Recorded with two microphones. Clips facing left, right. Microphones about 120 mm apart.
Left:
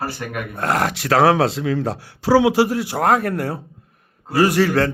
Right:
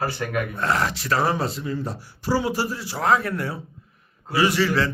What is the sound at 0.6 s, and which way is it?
A man's voice, 50° left (ahead or behind).